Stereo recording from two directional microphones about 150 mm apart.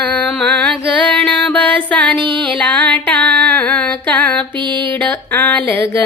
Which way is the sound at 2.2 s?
35° right (ahead or behind).